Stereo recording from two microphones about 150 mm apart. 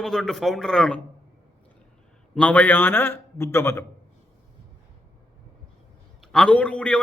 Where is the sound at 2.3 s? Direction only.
10° left (ahead or behind).